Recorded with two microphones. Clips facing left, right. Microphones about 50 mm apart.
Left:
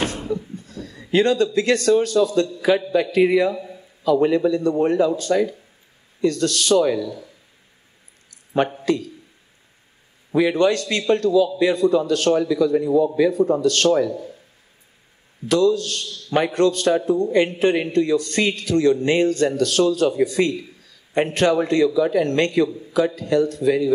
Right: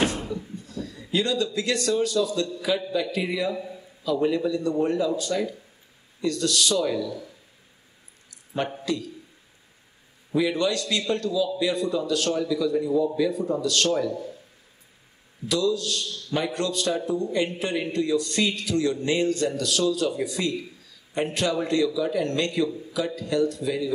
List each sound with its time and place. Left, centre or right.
0.6 s a man's voice: left
3.5 s a sound: centre
4.0 s a man's voice: left
8.8 s a man's voice: left
10.5 s a man's voice: left
15.4 s a man's voice: left